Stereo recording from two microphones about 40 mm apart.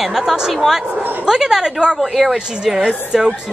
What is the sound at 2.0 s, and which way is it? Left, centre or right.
Speech, centre.